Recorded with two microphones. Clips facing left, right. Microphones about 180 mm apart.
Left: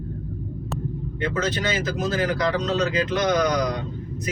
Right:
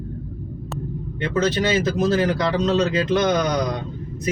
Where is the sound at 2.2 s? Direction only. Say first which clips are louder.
Right 3 dB; 30° right (ahead or behind).